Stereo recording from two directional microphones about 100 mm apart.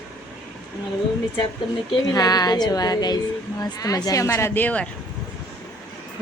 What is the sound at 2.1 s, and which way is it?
Speech, 40° left (ahead or behind).